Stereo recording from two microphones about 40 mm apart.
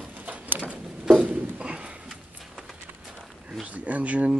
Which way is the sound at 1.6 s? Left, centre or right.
Right.